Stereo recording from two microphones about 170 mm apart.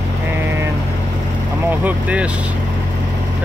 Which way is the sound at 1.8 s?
10° right (ahead or behind).